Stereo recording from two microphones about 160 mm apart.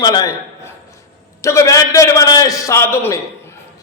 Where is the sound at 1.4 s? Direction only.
20° left (ahead or behind).